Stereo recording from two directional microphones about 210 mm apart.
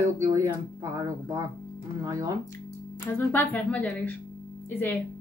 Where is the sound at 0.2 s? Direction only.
15° right (ahead or behind).